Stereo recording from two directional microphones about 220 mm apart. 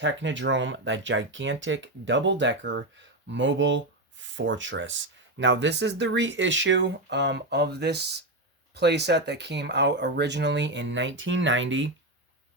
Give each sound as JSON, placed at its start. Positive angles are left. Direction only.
{"t": 0.0, "sound": "speech", "side_deg": -55}